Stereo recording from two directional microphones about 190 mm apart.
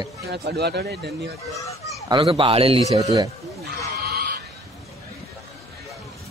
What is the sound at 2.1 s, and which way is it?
Speech, 25° right (ahead or behind).